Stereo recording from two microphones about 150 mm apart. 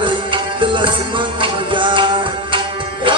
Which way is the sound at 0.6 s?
35° right (ahead or behind).